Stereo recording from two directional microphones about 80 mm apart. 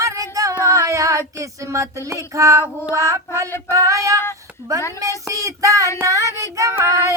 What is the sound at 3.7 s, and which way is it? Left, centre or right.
Child singing, right.